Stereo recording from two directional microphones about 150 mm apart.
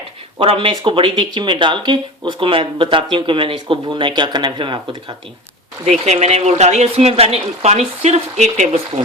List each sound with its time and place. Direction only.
0.3 s speech: 35° right (ahead or behind)
5.8 s speech: 45° right (ahead or behind)